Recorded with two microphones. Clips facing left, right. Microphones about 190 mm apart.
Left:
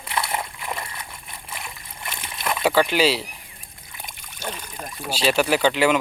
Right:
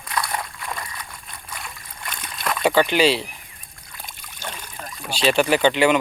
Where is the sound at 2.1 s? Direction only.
25° left (ahead or behind).